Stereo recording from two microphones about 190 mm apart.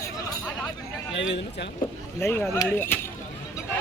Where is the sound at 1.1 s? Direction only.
70° left (ahead or behind).